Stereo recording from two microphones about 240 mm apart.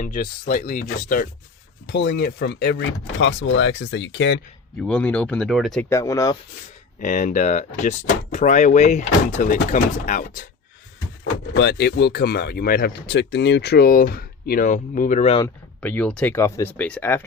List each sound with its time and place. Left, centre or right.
0.0 s speech: left
1.9 s speech: left
4.8 s speech: centre
5.9 s speech: centre
7.0 s speech: left
11.2 s speech: left
15.8 s speech: centre